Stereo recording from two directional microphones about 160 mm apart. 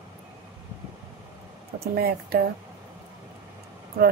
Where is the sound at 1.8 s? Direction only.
75° right (ahead or behind).